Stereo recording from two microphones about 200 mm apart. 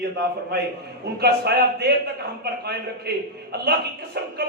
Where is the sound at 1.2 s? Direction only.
55° right (ahead or behind).